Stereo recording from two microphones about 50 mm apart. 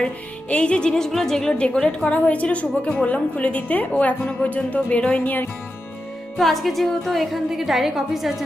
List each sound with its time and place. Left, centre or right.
0.5 s a woman's voice: left
1.5 s a woman's voice: left
6.3 s a woman's voice: centre